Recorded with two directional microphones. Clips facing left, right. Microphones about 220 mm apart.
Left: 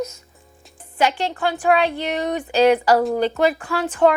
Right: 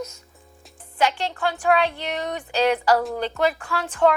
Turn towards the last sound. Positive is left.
turn(degrees=5)  # may be behind; listen again after turning